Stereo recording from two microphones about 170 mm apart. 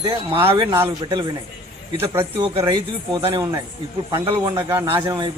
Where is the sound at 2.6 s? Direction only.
20° right (ahead or behind).